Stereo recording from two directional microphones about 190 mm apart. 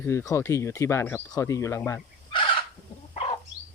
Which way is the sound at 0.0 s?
15° left (ahead or behind).